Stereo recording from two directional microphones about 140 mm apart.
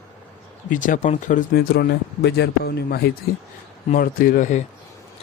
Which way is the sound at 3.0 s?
90° left.